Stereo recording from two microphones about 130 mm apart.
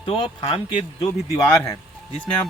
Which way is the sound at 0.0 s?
45° left (ahead or behind).